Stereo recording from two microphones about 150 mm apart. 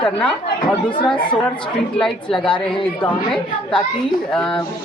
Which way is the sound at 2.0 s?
5° left (ahead or behind).